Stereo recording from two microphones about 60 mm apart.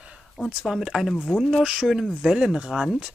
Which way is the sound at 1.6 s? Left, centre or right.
Centre.